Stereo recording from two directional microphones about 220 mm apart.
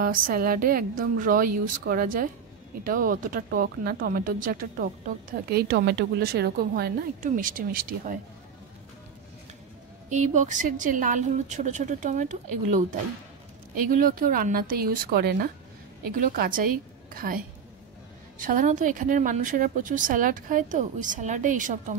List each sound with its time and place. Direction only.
0.0 s speech: 40° right (ahead or behind)
10.0 s speech: 35° right (ahead or behind)
13.8 s speech: 40° right (ahead or behind)
18.4 s speech: 40° right (ahead or behind)